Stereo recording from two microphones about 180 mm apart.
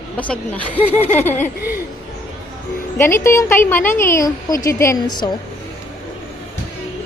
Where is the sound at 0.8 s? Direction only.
35° left (ahead or behind).